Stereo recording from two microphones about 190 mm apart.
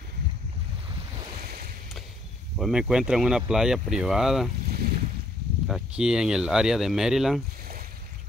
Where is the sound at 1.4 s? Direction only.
55° right (ahead or behind).